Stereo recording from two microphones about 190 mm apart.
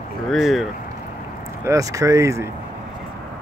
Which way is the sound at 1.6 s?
15° right (ahead or behind).